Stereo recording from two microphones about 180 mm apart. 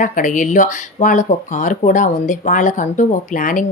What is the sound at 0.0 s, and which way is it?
Speech, 45° left (ahead or behind).